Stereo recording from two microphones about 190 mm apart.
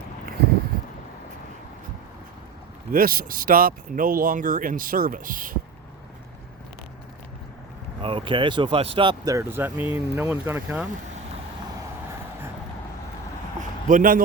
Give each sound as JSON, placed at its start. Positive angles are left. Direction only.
{"t": 2.9, "sound": "speech", "side_deg": -50}
{"t": 8.0, "sound": "speech", "side_deg": -25}
{"t": 13.6, "sound": "a sound", "side_deg": -45}